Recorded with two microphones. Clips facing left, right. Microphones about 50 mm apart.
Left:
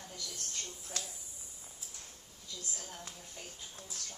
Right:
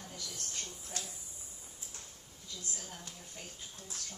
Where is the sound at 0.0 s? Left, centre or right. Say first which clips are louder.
Even; centre.